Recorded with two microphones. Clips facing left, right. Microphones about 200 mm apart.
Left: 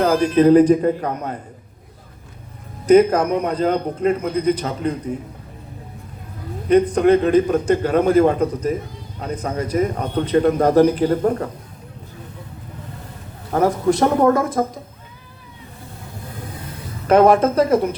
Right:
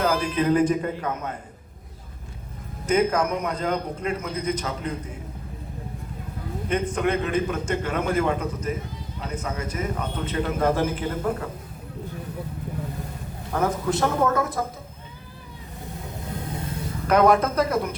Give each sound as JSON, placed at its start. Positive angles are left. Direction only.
{"t": 0.0, "sound": "a man's voice", "side_deg": 35}
{"t": 2.8, "sound": "a man's voice", "side_deg": 35}
{"t": 6.7, "sound": "a man's voice", "side_deg": 40}
{"t": 13.5, "sound": "speech", "side_deg": 45}
{"t": 17.1, "sound": "speech", "side_deg": 30}